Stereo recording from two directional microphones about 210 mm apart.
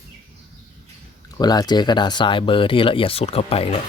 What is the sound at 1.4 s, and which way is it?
Speech, 20° left (ahead or behind).